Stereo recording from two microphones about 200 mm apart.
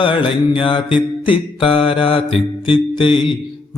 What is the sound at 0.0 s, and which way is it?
Mantra, 25° left (ahead or behind).